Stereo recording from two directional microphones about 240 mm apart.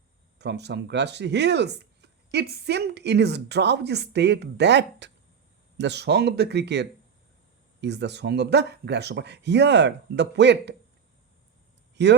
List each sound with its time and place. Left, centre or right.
0.3 s speech: right
12.0 s speech: right